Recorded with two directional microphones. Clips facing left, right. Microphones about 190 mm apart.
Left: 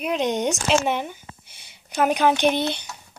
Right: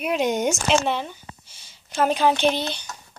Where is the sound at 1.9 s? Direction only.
15° left (ahead or behind).